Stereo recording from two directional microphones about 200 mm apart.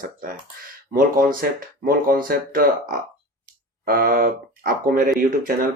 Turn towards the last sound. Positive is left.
turn(degrees=-45)  # may be behind; listen again after turning